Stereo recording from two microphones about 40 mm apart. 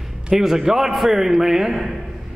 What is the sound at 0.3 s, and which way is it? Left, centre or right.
A man's voice, centre.